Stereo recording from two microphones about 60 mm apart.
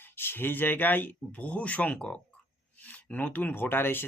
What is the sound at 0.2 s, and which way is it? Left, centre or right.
Speech, left.